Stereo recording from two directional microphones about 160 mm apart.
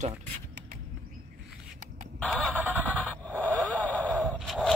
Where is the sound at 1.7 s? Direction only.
50° right (ahead or behind).